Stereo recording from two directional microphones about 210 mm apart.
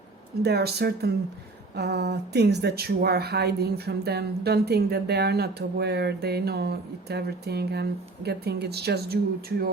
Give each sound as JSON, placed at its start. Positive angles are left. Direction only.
{"t": 0.4, "sound": "speech", "side_deg": -50}